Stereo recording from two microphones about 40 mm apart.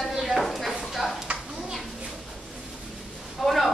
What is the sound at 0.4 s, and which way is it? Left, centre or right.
Chopping, centre.